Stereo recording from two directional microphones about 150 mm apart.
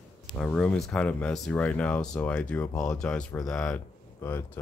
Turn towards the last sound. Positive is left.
turn(degrees=15)  # may be behind; listen again after turning